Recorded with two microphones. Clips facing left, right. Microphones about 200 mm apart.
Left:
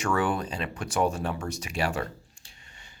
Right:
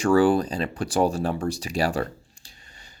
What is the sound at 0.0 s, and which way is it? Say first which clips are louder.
Speech: right 9 dB; 35° right (ahead or behind).